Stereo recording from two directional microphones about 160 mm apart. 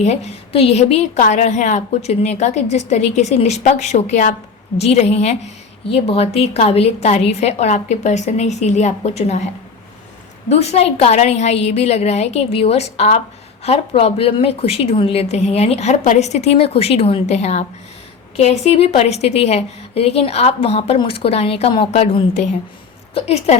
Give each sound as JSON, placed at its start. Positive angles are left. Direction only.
{"t": 0.0, "sound": "a woman's voice", "side_deg": 45}
{"t": 10.5, "sound": "a woman's voice", "side_deg": 40}
{"t": 23.1, "sound": "a woman's voice", "side_deg": 40}